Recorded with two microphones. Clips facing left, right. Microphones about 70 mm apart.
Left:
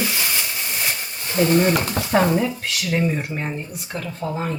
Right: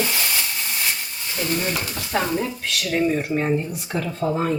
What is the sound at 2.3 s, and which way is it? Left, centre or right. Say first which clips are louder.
Speech: left 3 dB; centre.